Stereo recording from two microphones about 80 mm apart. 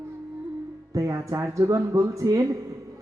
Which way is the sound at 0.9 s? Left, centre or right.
Right.